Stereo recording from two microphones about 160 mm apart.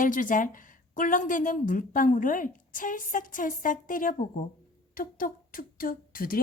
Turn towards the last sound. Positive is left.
turn(degrees=65)  # may be behind; listen again after turning